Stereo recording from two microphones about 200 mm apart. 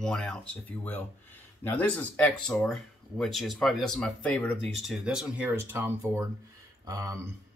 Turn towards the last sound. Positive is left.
turn(degrees=-15)  # may be behind; listen again after turning